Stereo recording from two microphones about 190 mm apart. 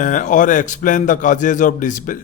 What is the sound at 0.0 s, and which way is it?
A man's voice, 40° left (ahead or behind).